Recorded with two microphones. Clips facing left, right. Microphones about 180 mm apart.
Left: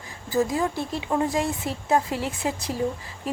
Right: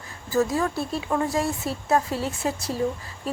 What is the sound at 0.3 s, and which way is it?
A woman's voice, 15° left (ahead or behind).